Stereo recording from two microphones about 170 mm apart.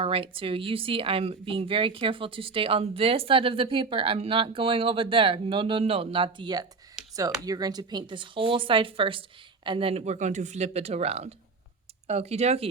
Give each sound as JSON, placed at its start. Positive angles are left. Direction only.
{"t": 0.0, "sound": "speech", "side_deg": -30}